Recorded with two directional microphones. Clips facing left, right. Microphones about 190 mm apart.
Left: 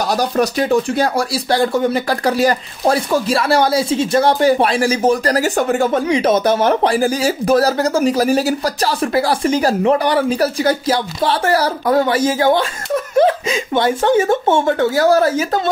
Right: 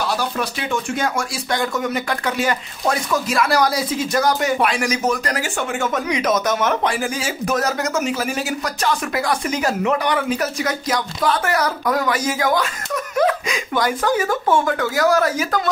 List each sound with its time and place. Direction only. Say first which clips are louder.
0.0 s speech: left 6 dB; 40° left (ahead or behind)